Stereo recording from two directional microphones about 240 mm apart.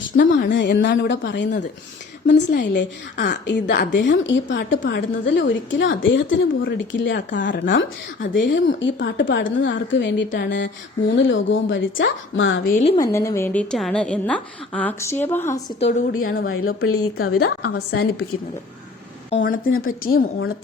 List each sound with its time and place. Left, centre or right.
0.2 s a woman's voice: left
7.3 s a woman's voice: left
8.3 s a woman's voice: left
12.6 s a woman's voice: left
13.0 s a woman's voice: centre
15.8 s a woman's voice: left
16.5 s speech: left
17.7 s a woman's voice: left
19.3 s a woman's voice: left
19.9 s a woman's voice: left